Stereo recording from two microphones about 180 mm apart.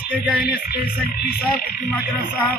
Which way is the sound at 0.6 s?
60° left (ahead or behind).